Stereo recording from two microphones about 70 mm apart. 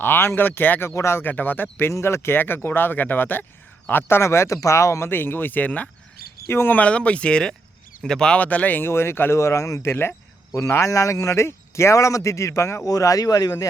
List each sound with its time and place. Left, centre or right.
0.0 s speech: left
0.9 s speech: left
1.2 s speech: left
1.9 s speech: left
6.5 s speech: left
6.7 s speech: centre
8.4 s speech: left
8.9 s speech: left
9.9 s speech: left
10.5 s speech: left